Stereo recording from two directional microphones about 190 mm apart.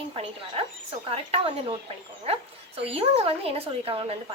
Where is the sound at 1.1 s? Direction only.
30° right (ahead or behind).